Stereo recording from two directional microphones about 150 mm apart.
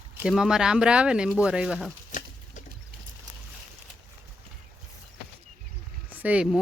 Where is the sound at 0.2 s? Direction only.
5° right (ahead or behind).